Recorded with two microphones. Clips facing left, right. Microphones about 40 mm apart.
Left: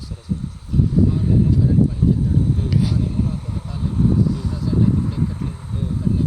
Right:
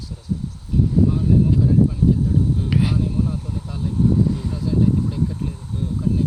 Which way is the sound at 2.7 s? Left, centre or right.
Right.